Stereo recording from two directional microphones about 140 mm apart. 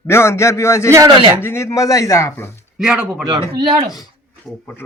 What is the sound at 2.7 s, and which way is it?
Speech, 5° right (ahead or behind).